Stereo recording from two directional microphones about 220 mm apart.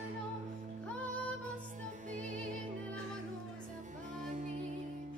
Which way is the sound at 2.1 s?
35° right (ahead or behind).